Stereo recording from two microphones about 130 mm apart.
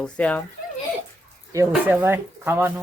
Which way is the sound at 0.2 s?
10° left (ahead or behind).